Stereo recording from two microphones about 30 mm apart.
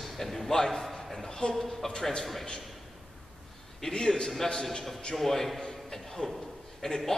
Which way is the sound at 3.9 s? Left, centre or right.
Left.